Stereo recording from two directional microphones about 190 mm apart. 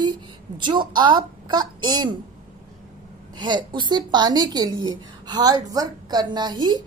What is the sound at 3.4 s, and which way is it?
A woman's voice, 25° right (ahead or behind).